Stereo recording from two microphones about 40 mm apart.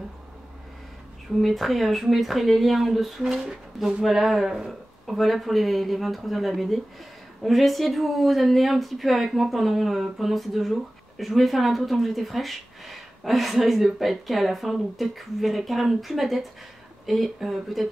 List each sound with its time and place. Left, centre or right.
1.4 s speech: centre
3.3 s speech: centre
4.0 s speech: centre